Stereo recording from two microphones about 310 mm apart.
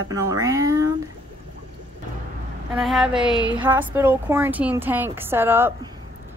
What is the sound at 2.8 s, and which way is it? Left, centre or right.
A woman's voice, centre.